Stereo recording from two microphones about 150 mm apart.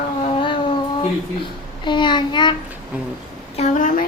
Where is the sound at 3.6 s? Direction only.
60° left (ahead or behind).